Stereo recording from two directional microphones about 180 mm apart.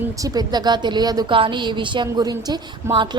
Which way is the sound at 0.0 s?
20° right (ahead or behind).